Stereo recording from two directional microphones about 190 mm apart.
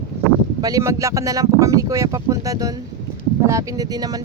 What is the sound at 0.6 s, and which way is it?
Speech, 15° right (ahead or behind).